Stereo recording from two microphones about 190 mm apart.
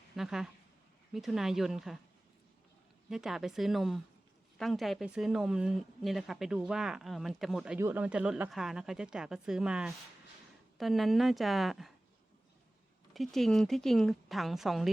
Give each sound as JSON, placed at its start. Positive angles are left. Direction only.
{"t": 0.2, "sound": "speech", "side_deg": 0}
{"t": 3.1, "sound": "speech", "side_deg": 0}
{"t": 13.1, "sound": "speech", "side_deg": 0}